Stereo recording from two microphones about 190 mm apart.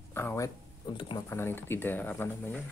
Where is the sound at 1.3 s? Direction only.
10° left (ahead or behind).